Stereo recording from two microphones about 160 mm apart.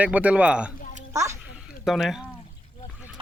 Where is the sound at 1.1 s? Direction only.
20° right (ahead or behind).